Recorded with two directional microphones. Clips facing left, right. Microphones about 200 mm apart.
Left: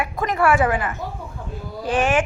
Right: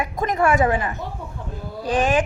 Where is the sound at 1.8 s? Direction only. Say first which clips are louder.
Even; 35° right (ahead or behind).